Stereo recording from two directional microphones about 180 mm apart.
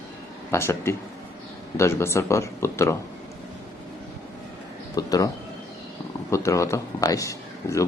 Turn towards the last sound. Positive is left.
turn(degrees=15)  # may be behind; listen again after turning